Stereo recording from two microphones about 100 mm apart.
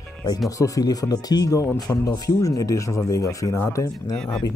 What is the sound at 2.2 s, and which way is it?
Speech, 30° left (ahead or behind).